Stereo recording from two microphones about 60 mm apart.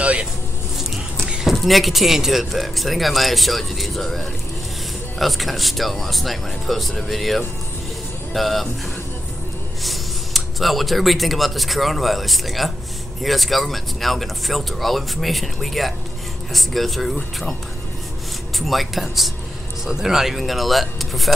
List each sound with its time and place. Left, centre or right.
0.0 s vehicle: centre
1.3 s speech: centre
9.8 s speech: centre
18.6 s speech: centre